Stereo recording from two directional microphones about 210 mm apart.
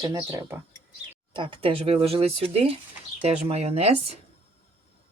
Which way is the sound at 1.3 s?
25° right (ahead or behind).